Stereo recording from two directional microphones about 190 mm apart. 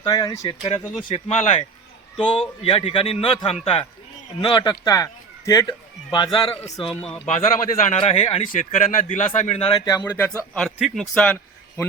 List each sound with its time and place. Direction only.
0.0 s a man's voice: 20° left (ahead or behind)
7.3 s speech: 40° left (ahead or behind)
8.5 s speech: 45° left (ahead or behind)
9.7 s a man's voice: 20° left (ahead or behind)
10.0 s speech: 10° left (ahead or behind)